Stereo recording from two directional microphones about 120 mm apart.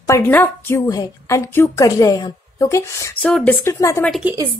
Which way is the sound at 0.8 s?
30° left (ahead or behind).